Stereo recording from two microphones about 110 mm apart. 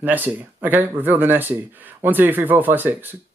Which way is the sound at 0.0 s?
15° right (ahead or behind).